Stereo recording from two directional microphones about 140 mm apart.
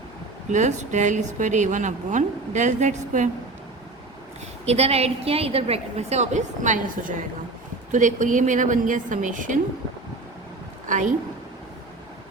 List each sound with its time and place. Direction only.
0.5 s a woman's voice: 60° right (ahead or behind)
4.6 s a woman's voice: 50° right (ahead or behind); by 9.6 s 70° right (ahead or behind)
10.8 s a woman's voice: 65° right (ahead or behind)